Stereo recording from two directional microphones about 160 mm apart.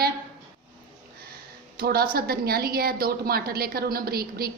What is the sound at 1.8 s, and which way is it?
A woman's voice, 75° right (ahead or behind).